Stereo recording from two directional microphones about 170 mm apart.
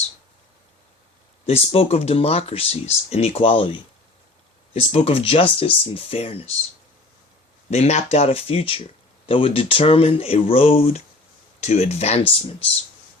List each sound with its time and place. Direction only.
1.5 s speech: 35° left (ahead or behind)
7.7 s speech: 40° left (ahead or behind)